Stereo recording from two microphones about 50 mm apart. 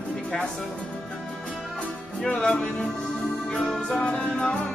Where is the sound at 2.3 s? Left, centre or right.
Left.